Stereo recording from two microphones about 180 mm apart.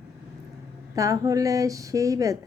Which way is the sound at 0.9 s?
20° right (ahead or behind).